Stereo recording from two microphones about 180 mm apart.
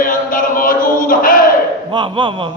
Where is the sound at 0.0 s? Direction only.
50° left (ahead or behind).